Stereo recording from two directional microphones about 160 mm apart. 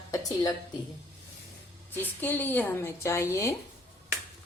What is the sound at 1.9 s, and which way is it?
A woman's voice, 10° left (ahead or behind).